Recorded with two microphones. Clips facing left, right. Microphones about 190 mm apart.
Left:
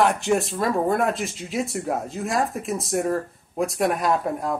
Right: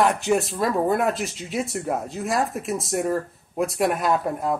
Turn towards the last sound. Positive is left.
turn(degrees=0)  # may be behind; listen again after turning